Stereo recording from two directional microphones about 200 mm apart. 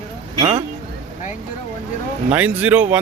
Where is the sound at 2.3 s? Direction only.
10° right (ahead or behind).